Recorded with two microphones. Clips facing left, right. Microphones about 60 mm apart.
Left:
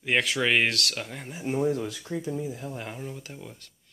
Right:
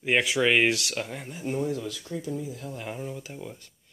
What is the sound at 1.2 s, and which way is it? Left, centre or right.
Speech, centre.